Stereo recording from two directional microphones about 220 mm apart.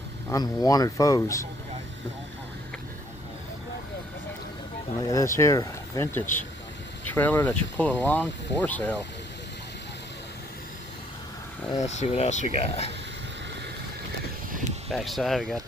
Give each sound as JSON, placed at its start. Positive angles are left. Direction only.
{"t": 0.3, "sound": "speech", "side_deg": 15}
{"t": 5.0, "sound": "speech", "side_deg": 15}
{"t": 11.8, "sound": "speech", "side_deg": 30}
{"t": 14.9, "sound": "speech", "side_deg": 0}